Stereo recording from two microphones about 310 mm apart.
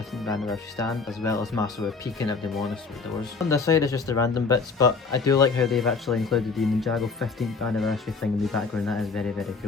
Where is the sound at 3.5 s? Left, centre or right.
Centre.